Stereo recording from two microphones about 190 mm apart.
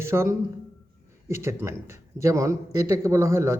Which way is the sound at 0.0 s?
15° right (ahead or behind).